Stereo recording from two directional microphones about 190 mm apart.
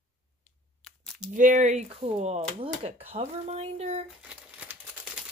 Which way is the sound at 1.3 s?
45° right (ahead or behind).